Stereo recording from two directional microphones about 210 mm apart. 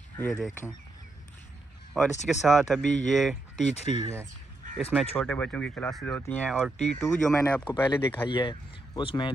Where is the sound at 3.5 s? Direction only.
35° left (ahead or behind).